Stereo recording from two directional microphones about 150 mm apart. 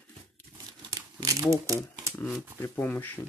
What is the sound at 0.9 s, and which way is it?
Crumpling, 25° right (ahead or behind).